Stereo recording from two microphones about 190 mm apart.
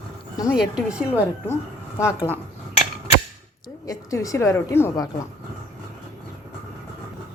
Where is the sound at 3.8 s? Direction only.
20° left (ahead or behind).